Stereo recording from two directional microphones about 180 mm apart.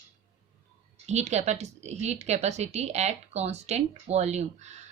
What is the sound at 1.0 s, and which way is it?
Speech, 40° right (ahead or behind).